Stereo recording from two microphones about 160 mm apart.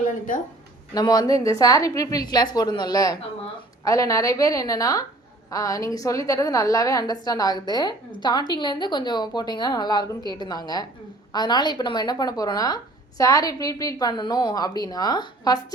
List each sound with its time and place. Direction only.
0.0 s speech: 55° left (ahead or behind)
0.9 s a woman's voice: 25° left (ahead or behind)